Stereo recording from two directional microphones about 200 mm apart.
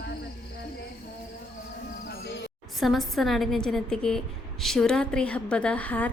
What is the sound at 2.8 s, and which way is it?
A woman's voice, centre (ahead or behind).